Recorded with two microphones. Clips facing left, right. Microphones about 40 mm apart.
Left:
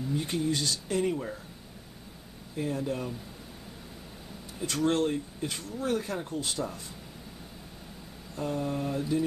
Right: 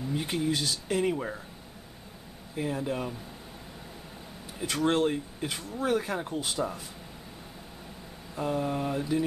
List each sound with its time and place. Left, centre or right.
0.1 s speech: centre
1.0 s speech: centre
2.5 s speech: centre
4.6 s speech: centre
8.4 s speech: centre